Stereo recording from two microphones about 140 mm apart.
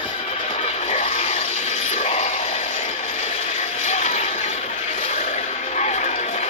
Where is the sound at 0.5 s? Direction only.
50° left (ahead or behind).